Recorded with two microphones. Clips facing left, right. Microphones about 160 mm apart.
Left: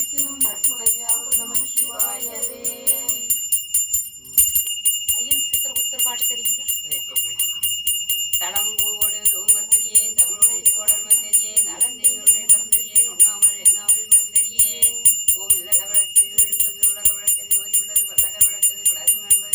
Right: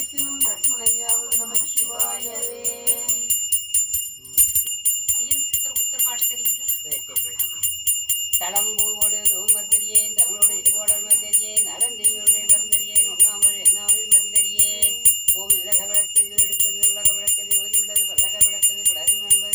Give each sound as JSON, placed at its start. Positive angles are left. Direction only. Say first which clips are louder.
{"t": 8.0, "sound": "jingle bell", "louder": "right 3 dB", "side_deg": -40}